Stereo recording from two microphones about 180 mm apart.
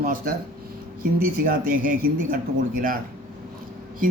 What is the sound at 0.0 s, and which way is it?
Speech, 50° right (ahead or behind).